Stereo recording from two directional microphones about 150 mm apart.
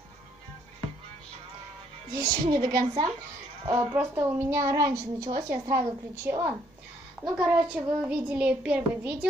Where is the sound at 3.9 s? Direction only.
10° right (ahead or behind).